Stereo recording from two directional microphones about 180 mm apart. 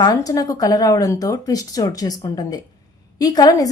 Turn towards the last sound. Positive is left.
turn(degrees=20)  # may be behind; listen again after turning